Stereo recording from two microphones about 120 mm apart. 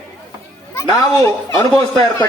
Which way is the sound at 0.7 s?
25° left (ahead or behind).